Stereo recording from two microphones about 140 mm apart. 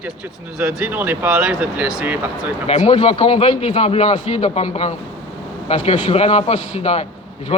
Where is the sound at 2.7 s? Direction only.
55° left (ahead or behind).